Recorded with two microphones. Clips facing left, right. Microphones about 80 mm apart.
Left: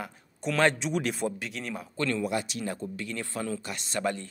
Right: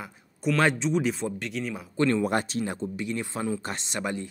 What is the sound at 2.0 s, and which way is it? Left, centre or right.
Speech, right.